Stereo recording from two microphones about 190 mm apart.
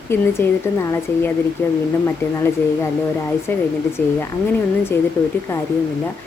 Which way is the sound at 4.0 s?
10° left (ahead or behind).